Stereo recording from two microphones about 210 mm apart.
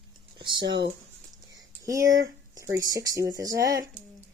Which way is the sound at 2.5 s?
15° right (ahead or behind).